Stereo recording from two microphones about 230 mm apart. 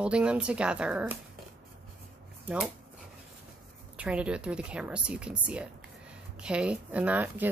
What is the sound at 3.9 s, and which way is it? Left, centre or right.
A woman's voice, centre.